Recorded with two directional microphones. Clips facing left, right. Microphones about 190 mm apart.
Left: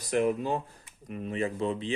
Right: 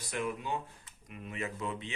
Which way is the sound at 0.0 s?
40° left (ahead or behind).